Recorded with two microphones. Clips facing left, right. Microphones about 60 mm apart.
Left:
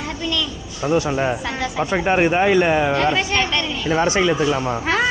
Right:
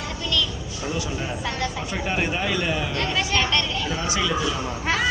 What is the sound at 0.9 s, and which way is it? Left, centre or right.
Speech, left.